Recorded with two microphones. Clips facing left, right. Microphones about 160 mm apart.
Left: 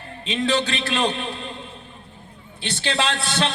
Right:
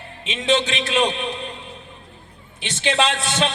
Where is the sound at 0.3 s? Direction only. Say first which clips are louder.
Right 1 dB; 20° right (ahead or behind).